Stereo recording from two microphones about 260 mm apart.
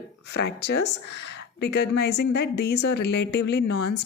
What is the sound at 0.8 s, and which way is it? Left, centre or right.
A woman's voice, left.